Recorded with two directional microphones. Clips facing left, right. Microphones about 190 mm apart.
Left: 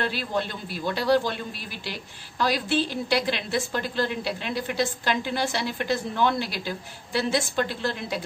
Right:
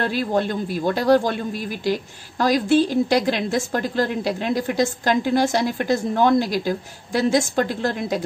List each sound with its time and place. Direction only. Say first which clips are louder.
0.0 s speech: right 6 dB; 45° right (ahead or behind)